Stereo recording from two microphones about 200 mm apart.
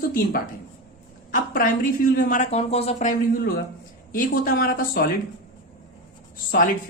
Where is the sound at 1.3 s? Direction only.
45° left (ahead or behind).